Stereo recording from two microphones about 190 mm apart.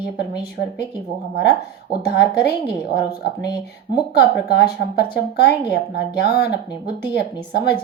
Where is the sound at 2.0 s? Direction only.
60° left (ahead or behind).